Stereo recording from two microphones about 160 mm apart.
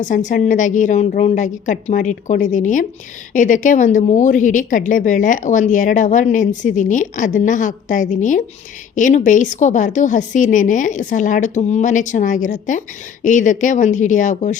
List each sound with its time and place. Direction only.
0.0 s a woman's voice: 50° left (ahead or behind)